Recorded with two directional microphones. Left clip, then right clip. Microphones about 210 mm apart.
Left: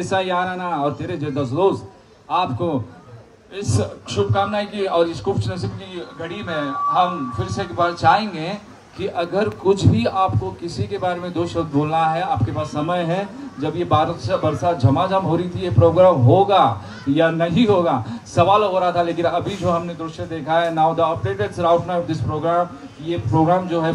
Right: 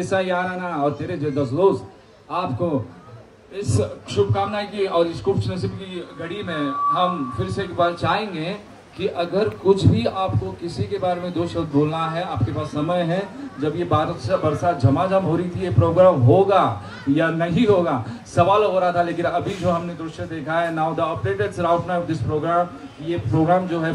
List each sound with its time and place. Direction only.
0.0 s a man's voice: 35° left (ahead or behind)
3.5 s a man's voice: 20° left (ahead or behind); by 23.9 s 40° left (ahead or behind)